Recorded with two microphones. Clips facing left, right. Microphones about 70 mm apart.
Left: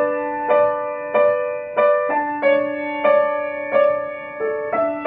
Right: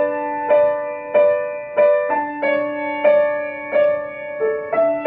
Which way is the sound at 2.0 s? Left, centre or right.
Centre.